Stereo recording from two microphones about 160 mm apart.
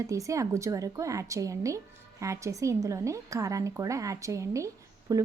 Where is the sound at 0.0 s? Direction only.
20° right (ahead or behind).